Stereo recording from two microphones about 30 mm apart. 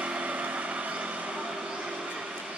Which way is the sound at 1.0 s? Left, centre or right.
Right.